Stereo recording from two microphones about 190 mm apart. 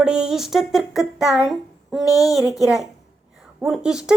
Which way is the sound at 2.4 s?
20° left (ahead or behind).